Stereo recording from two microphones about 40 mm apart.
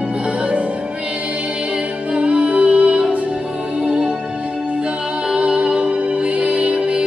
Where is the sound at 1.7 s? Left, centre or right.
Right.